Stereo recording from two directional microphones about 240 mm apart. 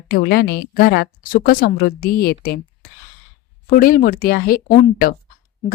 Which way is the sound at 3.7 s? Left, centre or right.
Left.